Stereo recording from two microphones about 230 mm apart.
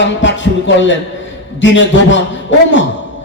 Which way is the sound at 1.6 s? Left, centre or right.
Left.